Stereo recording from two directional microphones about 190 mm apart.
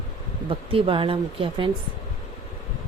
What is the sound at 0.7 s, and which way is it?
Speech, 30° right (ahead or behind).